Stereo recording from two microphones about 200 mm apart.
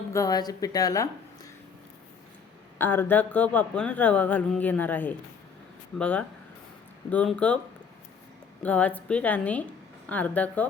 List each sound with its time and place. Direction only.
0.1 s speech: 15° left (ahead or behind)
2.7 s speech: 10° left (ahead or behind)
8.6 s speech: 5° left (ahead or behind)